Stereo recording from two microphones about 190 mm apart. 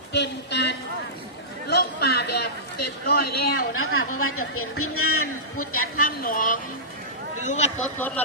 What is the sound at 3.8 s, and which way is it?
Speech, 90° left.